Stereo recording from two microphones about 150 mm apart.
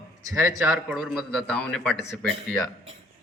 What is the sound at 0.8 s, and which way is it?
A man's voice, centre (ahead or behind).